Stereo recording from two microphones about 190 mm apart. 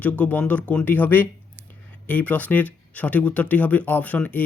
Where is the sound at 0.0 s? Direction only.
10° left (ahead or behind).